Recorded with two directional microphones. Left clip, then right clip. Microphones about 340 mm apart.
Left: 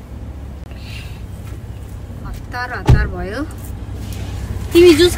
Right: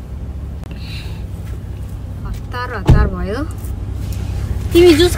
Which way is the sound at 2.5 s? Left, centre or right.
Centre.